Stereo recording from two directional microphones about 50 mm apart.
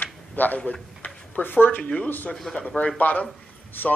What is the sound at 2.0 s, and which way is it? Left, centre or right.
Speech, left.